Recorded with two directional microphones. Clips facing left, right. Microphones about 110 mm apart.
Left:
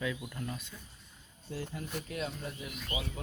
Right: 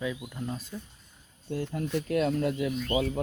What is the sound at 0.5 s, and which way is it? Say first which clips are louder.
Speech: right 7 dB; 40° right (ahead or behind).